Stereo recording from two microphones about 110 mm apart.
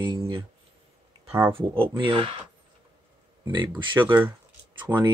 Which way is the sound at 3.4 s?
40° right (ahead or behind).